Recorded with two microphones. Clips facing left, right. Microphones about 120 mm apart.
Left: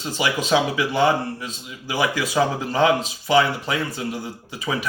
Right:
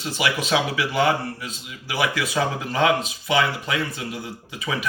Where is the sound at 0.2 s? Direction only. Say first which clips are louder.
Left 2 dB; 35° left (ahead or behind).